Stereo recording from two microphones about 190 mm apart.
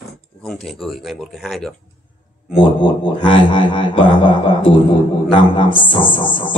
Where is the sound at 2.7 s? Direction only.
25° left (ahead or behind).